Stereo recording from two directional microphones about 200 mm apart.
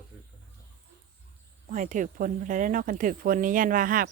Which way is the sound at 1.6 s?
40° right (ahead or behind).